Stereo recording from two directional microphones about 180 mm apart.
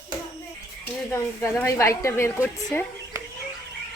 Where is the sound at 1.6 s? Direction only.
15° left (ahead or behind).